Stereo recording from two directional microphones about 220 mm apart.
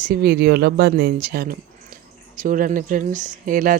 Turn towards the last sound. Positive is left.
turn(degrees=-40)  # may be behind; listen again after turning